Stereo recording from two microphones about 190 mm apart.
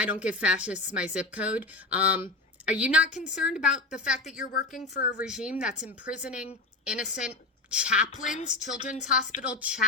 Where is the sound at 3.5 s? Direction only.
5° right (ahead or behind).